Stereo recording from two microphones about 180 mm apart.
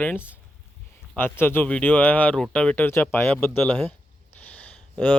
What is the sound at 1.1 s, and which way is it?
Speech, 10° left (ahead or behind).